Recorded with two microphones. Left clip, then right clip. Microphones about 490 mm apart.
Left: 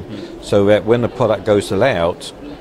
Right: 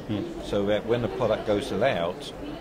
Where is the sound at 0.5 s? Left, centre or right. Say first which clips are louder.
Left 13 dB; left.